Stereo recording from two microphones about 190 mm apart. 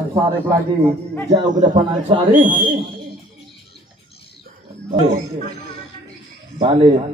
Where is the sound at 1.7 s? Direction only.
25° right (ahead or behind).